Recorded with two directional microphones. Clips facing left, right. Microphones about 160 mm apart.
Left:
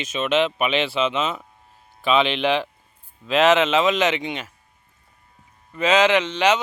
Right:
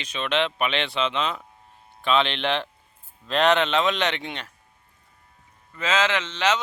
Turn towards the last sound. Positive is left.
turn(degrees=10)  # may be behind; listen again after turning